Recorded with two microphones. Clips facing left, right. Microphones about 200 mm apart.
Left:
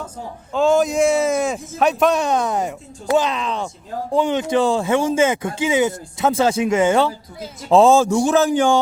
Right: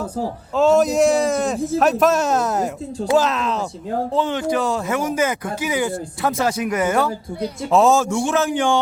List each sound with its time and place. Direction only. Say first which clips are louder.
0.5 s speech: right 1 dB; centre (ahead or behind)
1.5 s speech: right 11 dB; 35° right (ahead or behind)
1.8 s speech: left 1 dB; centre (ahead or behind)
4.1 s a man's voice: left 5 dB; 15° left (ahead or behind); by 8.8 s 40° left (ahead or behind)